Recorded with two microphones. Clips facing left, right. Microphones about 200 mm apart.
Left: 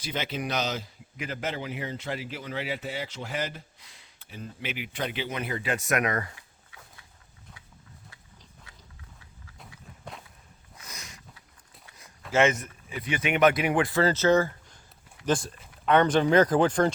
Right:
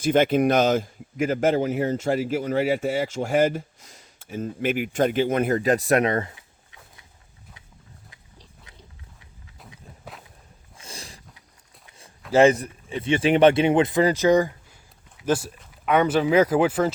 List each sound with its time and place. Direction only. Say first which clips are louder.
0.0 s speech: right 14 dB; 50° right (ahead or behind); by 7.0 s 20° right (ahead or behind)
10.8 s a sound: right 5 dB; 30° right (ahead or behind)
12.3 s speech: right 7 dB; 35° right (ahead or behind); by 16.9 s 5° right (ahead or behind)